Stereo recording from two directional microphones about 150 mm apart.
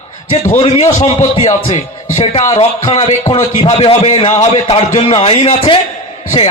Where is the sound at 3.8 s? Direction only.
40° left (ahead or behind).